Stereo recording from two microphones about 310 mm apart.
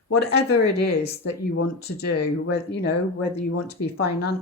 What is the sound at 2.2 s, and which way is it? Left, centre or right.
Speech, left.